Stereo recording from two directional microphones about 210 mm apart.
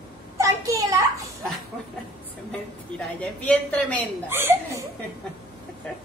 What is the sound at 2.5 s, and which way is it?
A man's voice, 5° left (ahead or behind).